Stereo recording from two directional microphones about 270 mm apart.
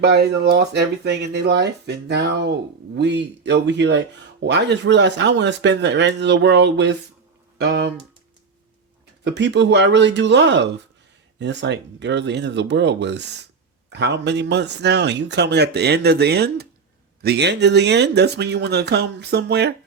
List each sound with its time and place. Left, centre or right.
0.0 s speech: right
9.2 s speech: right